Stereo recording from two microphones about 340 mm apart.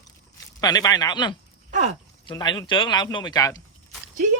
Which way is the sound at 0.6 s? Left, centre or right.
Centre.